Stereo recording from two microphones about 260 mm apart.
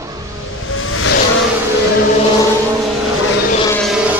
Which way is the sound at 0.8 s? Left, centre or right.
Left.